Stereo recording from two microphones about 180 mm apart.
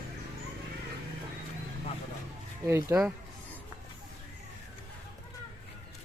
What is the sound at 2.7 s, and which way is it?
Speech, 15° right (ahead or behind).